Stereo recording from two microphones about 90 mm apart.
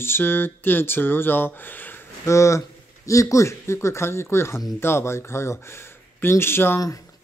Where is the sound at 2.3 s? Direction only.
35° left (ahead or behind).